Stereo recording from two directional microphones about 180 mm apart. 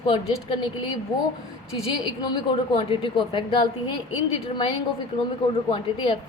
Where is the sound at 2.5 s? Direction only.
30° left (ahead or behind).